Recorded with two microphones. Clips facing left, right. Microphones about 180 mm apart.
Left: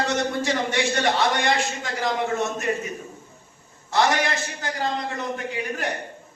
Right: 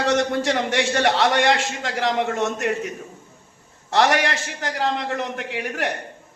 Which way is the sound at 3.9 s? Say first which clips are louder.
Right 3 dB; 80° right.